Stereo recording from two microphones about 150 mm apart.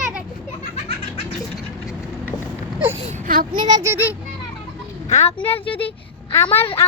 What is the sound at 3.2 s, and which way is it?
Speech, 65° right (ahead or behind).